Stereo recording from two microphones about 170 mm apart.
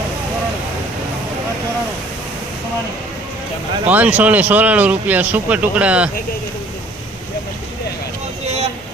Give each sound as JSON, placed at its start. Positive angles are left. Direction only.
{"t": 3.8, "sound": "speech", "side_deg": -10}
{"t": 8.4, "sound": "vehicle", "side_deg": -40}